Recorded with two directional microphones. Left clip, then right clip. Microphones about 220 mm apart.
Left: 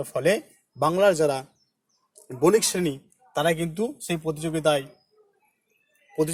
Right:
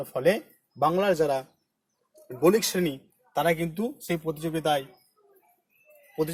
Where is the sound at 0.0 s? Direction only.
40° left (ahead or behind).